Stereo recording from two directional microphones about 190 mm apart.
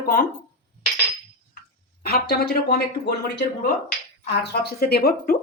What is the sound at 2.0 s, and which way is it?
Speech, 55° left (ahead or behind).